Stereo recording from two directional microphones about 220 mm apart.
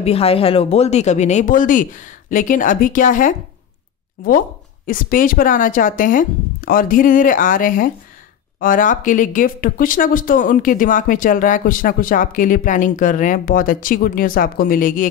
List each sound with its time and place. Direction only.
0.0 s speech: 25° left (ahead or behind)